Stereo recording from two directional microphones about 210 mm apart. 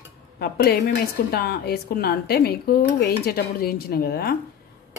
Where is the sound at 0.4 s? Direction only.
50° left (ahead or behind).